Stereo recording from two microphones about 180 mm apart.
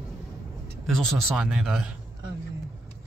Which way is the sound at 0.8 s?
Centre (ahead or behind).